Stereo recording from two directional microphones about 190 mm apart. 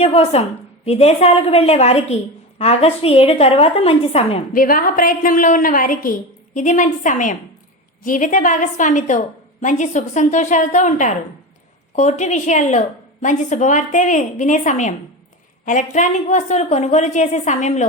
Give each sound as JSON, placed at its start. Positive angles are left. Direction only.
{"t": 0.0, "sound": "a woman's voice", "side_deg": 30}
{"t": 4.5, "sound": "a woman's voice", "side_deg": 45}